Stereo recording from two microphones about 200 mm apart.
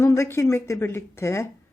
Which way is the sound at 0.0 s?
15° left (ahead or behind).